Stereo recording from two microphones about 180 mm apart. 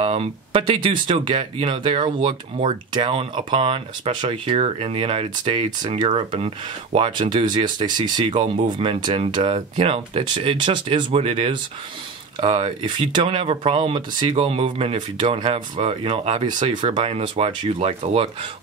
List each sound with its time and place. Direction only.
0.0 s speech: 30° right (ahead or behind)